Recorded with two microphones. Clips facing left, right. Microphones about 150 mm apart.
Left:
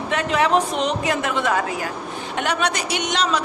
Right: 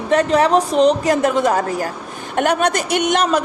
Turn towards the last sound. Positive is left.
turn(degrees=-50)  # may be behind; listen again after turning